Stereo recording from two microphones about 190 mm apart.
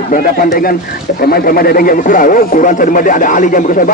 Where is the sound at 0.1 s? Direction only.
45° left (ahead or behind).